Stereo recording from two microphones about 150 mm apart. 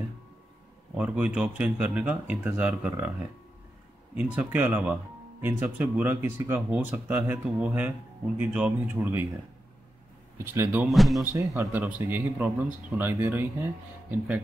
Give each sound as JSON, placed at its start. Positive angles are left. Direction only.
{"t": 0.9, "sound": "speech", "side_deg": -10}
{"t": 4.1, "sound": "speech", "side_deg": -10}
{"t": 10.3, "sound": "speech", "side_deg": -15}
{"t": 10.9, "sound": "speech", "side_deg": 0}
{"t": 11.2, "sound": "speech", "side_deg": -20}